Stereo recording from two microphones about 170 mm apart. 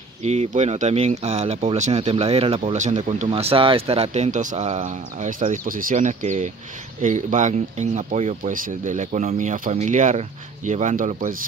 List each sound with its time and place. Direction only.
0.2 s speech: 40° right (ahead or behind)